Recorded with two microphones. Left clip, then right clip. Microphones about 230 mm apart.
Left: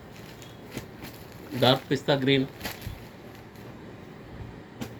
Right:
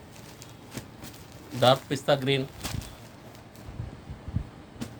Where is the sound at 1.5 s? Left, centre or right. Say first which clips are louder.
Right 1 dB; right.